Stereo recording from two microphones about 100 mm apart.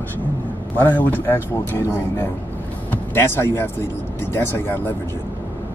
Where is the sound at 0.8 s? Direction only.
15° left (ahead or behind).